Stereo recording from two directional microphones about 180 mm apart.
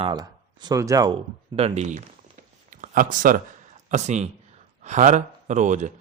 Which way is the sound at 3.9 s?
40° right (ahead or behind).